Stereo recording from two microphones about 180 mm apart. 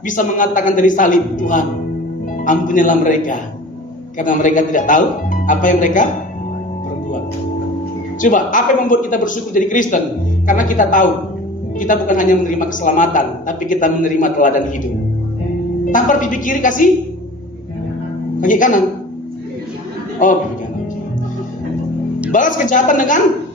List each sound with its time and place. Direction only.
0.1 s a woman's voice: 45° left (ahead or behind)
8.2 s a woman's voice: 45° left (ahead or behind)
15.9 s a woman's voice: 45° left (ahead or behind)
18.3 s speech: 45° left (ahead or behind)
20.2 s a woman's voice: 50° left (ahead or behind)
22.3 s a woman's voice: 45° left (ahead or behind)